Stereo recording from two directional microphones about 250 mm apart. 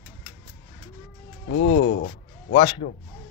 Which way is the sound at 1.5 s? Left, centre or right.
Left.